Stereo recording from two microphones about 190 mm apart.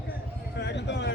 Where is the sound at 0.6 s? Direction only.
65° left (ahead or behind).